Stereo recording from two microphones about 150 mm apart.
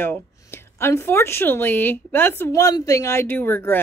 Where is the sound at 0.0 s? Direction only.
15° left (ahead or behind).